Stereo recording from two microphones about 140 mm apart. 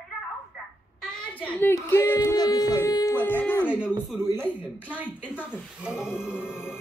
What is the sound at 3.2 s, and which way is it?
Music, 15° left (ahead or behind).